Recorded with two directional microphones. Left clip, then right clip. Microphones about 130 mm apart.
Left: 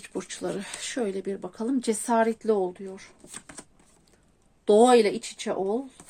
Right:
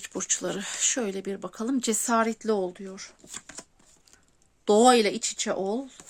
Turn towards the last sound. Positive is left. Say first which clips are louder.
# even
turn(degrees=-85)